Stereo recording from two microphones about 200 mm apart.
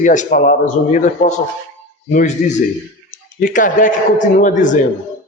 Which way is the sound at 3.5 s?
40° left (ahead or behind).